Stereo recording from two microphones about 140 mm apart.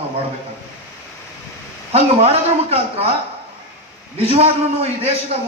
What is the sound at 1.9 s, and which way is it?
A man's voice, 45° right (ahead or behind).